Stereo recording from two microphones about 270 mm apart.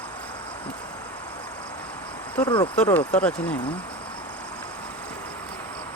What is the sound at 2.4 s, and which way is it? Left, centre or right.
Speech, centre.